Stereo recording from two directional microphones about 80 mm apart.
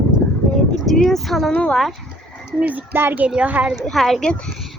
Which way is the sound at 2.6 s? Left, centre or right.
Centre.